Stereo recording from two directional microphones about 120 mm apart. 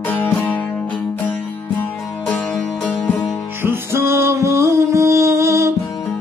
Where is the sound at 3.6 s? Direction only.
20° right (ahead or behind).